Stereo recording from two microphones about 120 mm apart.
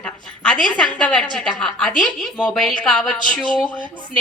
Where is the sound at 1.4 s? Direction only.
5° left (ahead or behind).